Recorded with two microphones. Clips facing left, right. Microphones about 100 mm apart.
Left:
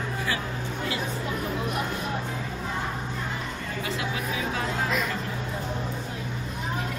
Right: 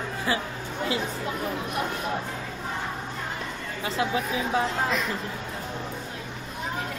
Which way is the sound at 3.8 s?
30° right (ahead or behind).